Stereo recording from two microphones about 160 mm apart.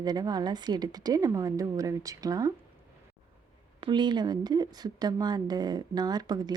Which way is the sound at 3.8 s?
30° right (ahead or behind).